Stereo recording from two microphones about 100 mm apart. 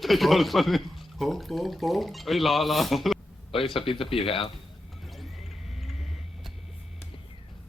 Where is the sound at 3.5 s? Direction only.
65° left (ahead or behind).